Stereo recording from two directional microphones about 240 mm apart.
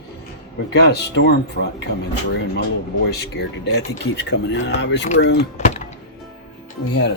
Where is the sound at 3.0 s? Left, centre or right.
Left.